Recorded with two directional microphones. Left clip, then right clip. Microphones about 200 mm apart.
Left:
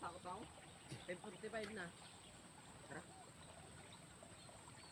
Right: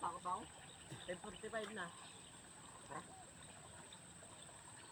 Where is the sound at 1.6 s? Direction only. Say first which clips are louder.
Right 3 dB; 20° left (ahead or behind).